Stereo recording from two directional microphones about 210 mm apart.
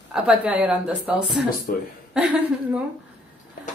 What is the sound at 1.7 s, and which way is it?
Speech, 45° left (ahead or behind).